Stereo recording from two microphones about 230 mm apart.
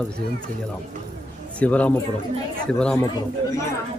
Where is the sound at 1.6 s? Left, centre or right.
Centre.